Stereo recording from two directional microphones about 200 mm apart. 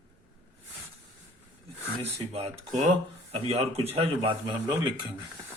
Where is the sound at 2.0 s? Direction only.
30° right (ahead or behind).